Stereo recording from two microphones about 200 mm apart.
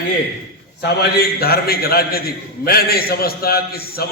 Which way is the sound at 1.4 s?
50° left (ahead or behind).